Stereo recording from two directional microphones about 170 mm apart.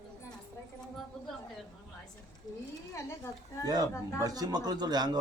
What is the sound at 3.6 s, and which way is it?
A woman's voice, 20° right (ahead or behind).